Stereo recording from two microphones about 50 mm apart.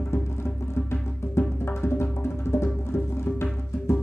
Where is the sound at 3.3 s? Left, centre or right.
Left.